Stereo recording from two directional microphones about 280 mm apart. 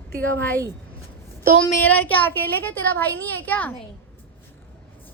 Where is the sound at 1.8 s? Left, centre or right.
Centre.